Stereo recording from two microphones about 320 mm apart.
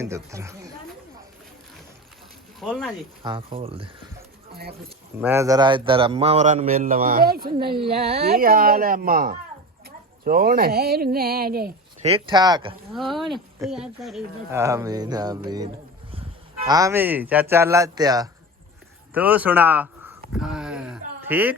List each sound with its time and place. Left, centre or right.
0.0 s speech: centre
2.6 s speech: centre
3.2 s speech: centre
5.2 s a man's voice: centre
13.1 s a man's voice: centre
20.3 s a sound: centre